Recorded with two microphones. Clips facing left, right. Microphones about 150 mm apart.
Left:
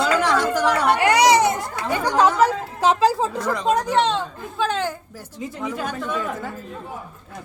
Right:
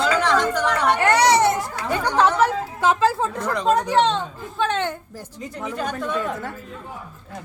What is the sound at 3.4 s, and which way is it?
A woman's voice, centre (ahead or behind).